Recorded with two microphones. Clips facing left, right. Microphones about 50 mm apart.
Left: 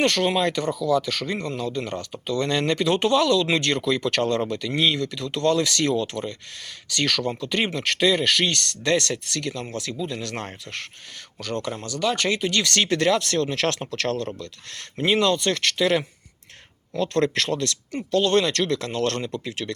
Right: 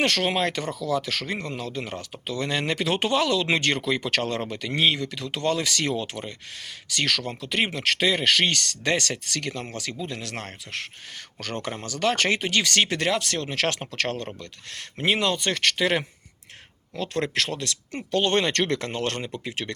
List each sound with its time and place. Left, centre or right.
0.0 s speech: right
4.8 s speech: centre
6.9 s speech: centre; by 10.2 s right
10.3 s speech: centre
11.4 s speech: right
12.6 s speech: centre
16.9 s speech: centre
18.1 s speech: right